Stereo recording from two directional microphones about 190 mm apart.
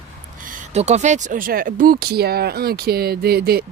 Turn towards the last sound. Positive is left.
turn(degrees=-55)  # may be behind; listen again after turning